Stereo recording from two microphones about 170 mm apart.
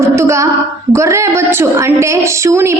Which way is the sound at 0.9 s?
15° right (ahead or behind).